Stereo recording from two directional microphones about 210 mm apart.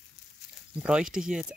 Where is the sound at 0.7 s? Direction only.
5° right (ahead or behind).